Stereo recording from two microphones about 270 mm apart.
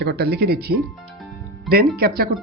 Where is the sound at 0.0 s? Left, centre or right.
Right.